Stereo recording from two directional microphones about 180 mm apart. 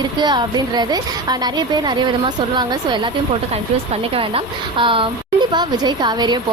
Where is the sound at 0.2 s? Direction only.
25° right (ahead or behind).